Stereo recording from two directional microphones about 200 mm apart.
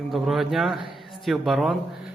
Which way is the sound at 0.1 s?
Centre (ahead or behind).